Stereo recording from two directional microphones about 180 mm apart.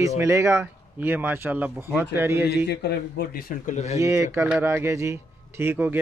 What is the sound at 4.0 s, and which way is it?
Speech, 15° right (ahead or behind).